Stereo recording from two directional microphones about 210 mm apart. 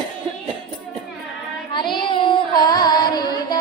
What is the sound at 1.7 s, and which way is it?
Child singing, 20° left (ahead or behind).